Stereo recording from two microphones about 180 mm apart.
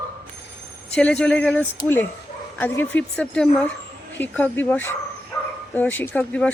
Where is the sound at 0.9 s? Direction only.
5° left (ahead or behind).